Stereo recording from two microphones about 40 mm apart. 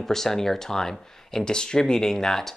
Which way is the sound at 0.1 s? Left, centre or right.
Centre.